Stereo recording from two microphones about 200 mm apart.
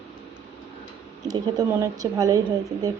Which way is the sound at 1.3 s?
20° right (ahead or behind).